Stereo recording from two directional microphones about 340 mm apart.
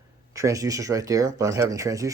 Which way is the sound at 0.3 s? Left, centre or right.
Centre.